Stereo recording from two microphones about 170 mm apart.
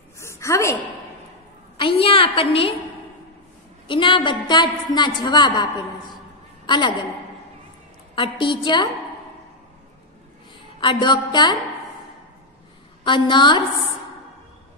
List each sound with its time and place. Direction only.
0.2 s a sound: 15° left (ahead or behind)
1.8 s a woman's voice: 30° left (ahead or behind)
3.8 s a woman's voice: 30° left (ahead or behind)
8.1 s a woman's voice: 30° left (ahead or behind)
10.8 s a woman's voice: 30° left (ahead or behind)
13.0 s a woman's voice: 25° left (ahead or behind)